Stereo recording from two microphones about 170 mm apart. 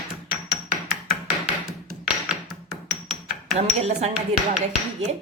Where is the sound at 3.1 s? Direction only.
40° right (ahead or behind).